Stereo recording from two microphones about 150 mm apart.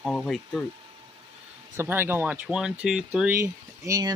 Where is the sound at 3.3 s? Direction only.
20° right (ahead or behind).